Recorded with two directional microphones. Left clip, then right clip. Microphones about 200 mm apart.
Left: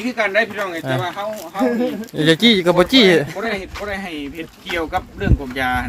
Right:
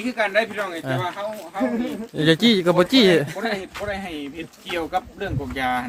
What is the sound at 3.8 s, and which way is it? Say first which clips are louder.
Speech: left 3 dB; 10° left (ahead or behind).